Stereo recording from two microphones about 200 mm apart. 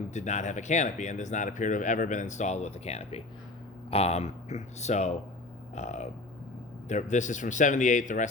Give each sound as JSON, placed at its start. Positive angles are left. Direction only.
{"t": 0.1, "sound": "speech", "side_deg": 35}